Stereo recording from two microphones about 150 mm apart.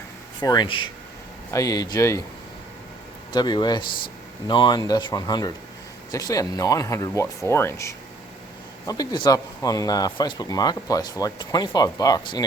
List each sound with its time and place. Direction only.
0.4 s speech: 30° left (ahead or behind)
3.3 s speech: 30° left (ahead or behind)